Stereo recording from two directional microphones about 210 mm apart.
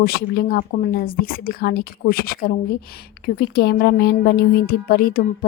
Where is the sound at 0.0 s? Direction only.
45° left (ahead or behind).